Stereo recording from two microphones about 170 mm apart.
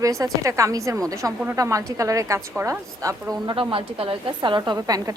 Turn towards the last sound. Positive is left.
turn(degrees=-20)  # may be behind; listen again after turning